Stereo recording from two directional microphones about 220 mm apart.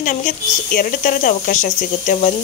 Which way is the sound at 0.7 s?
35° left (ahead or behind).